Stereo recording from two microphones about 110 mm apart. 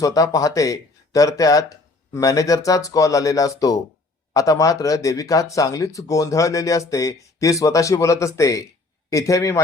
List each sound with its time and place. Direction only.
0.0 s speech: 30° left (ahead or behind)